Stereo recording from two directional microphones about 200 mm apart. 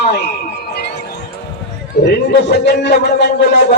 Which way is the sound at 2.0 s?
55° left (ahead or behind).